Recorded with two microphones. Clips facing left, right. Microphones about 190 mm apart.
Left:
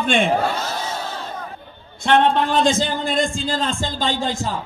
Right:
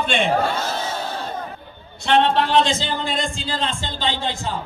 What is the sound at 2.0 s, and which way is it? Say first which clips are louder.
Speech: left 1 dB; 50° left (ahead or behind).